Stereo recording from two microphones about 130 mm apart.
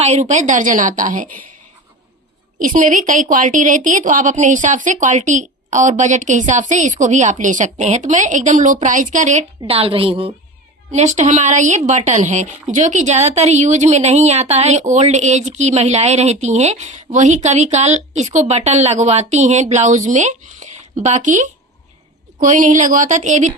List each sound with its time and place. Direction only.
0.0 s a woman's voice: 60° right (ahead or behind); by 1.5 s 90° right
2.6 s a woman's voice: 90° right; by 9.4 s 75° right (ahead or behind)
9.6 s a woman's voice: 50° right (ahead or behind)
10.9 s a woman's voice: 65° right (ahead or behind)